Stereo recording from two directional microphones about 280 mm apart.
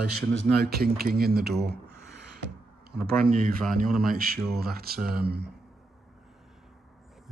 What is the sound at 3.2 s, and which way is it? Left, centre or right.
Speech, right.